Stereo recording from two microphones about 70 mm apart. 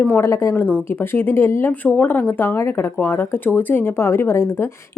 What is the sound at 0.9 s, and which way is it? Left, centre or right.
Speech, left.